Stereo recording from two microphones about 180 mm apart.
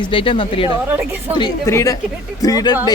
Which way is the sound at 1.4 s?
15° left (ahead or behind).